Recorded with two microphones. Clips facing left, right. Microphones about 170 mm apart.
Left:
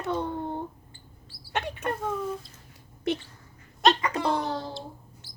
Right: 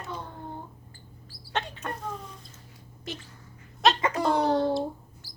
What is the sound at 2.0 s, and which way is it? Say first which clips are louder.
Speech: left 8 dB; 55° left (ahead or behind).